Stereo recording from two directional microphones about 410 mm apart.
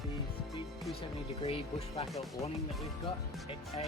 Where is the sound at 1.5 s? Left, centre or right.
Centre.